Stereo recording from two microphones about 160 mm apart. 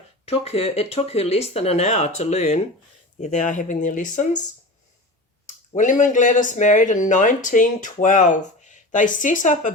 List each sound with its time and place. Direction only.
0.3 s speech: 40° left (ahead or behind)
5.7 s speech: 50° left (ahead or behind)